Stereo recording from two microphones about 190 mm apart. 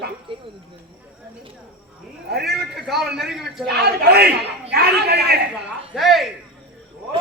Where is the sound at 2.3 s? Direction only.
55° right (ahead or behind).